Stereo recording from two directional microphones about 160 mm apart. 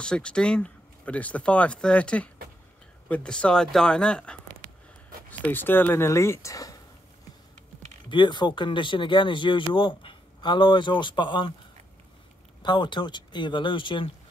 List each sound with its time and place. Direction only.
0.0 s speech: 5° left (ahead or behind)
5.4 s speech: 10° left (ahead or behind)
8.1 s speech: 30° left (ahead or behind)
12.6 s speech: 30° left (ahead or behind)